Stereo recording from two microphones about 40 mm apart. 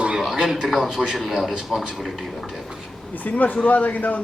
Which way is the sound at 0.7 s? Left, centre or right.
Centre.